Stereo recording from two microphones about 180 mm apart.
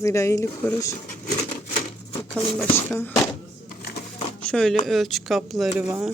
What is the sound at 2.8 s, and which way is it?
Speech, 10° left (ahead or behind).